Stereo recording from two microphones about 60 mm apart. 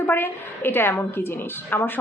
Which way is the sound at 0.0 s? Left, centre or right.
Left.